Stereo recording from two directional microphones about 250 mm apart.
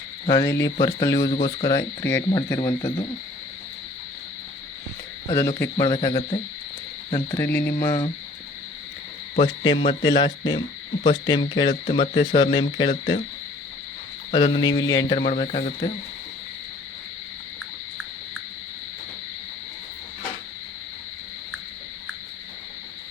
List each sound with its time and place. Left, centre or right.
0.3 s cricket: centre
5.3 s cricket: centre
9.4 s speech: centre
10.1 s cricket: centre
11.0 s speech: centre
14.3 s speech: centre